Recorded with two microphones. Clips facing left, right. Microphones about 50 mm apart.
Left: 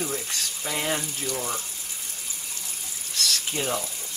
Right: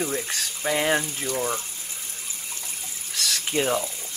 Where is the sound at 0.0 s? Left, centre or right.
Right.